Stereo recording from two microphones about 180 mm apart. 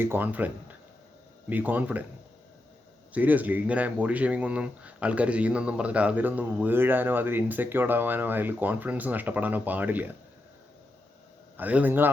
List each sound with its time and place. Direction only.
0.0 s speech: 10° right (ahead or behind)
3.1 s speech: 10° right (ahead or behind)
11.5 s speech: 10° right (ahead or behind)